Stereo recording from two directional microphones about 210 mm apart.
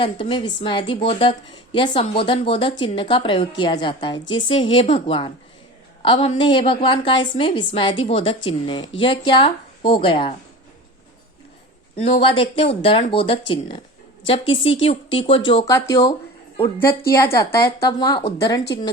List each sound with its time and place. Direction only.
0.0 s a woman's voice: 25° left (ahead or behind)
11.9 s a woman's voice: 25° left (ahead or behind)